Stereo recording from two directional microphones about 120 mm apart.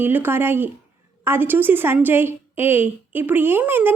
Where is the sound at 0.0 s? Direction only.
15° right (ahead or behind).